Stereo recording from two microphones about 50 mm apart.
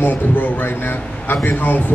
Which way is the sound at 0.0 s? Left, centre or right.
Left.